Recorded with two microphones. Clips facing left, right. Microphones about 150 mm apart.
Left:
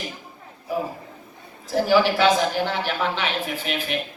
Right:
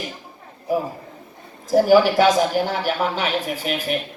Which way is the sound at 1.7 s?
45° right (ahead or behind).